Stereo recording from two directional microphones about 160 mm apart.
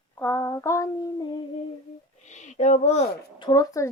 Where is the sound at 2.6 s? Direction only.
45° left (ahead or behind).